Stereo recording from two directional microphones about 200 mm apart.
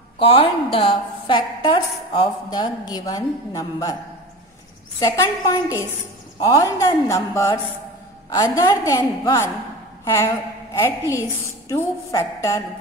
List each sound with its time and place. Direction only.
0.2 s a woman's voice: 25° left (ahead or behind)
5.0 s a woman's voice: 15° left (ahead or behind)